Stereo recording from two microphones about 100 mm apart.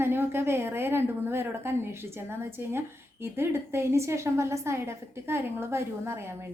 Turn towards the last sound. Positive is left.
turn(degrees=-25)  # may be behind; listen again after turning